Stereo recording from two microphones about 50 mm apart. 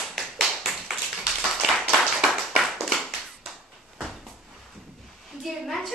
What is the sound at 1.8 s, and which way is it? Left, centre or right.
Clapping, centre.